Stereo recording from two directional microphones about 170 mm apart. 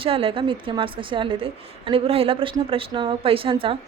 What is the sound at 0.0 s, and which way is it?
A woman's voice, 30° right (ahead or behind).